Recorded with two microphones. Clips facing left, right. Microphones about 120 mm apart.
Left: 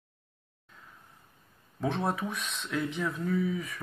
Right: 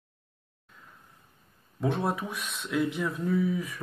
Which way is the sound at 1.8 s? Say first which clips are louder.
Right 2 dB; centre (ahead or behind).